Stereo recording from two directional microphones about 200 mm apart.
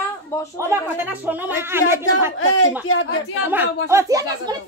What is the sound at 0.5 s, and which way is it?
Speech, 10° right (ahead or behind).